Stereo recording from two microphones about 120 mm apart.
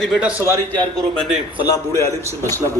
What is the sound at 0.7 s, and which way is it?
Speech, 10° left (ahead or behind).